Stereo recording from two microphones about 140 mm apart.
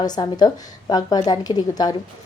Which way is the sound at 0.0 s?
30° left (ahead or behind).